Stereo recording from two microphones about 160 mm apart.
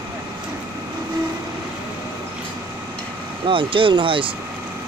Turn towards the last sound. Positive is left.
turn(degrees=-30)  # may be behind; listen again after turning